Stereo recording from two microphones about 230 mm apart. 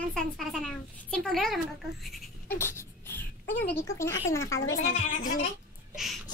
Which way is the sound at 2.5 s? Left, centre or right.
Centre.